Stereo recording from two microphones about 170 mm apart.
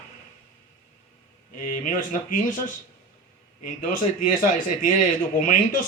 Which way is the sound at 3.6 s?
50° left (ahead or behind).